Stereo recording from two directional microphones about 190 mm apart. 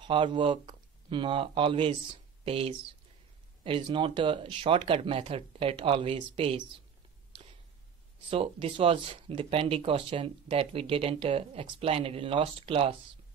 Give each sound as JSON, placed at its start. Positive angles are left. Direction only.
{"t": 0.0, "sound": "speech", "side_deg": -25}
{"t": 8.3, "sound": "speech", "side_deg": -30}